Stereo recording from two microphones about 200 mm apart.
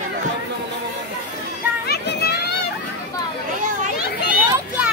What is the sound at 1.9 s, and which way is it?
Children playing, 55° left (ahead or behind).